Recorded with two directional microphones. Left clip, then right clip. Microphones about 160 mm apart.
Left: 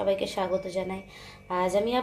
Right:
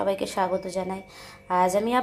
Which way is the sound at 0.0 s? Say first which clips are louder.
Right 2 dB; 25° right (ahead or behind).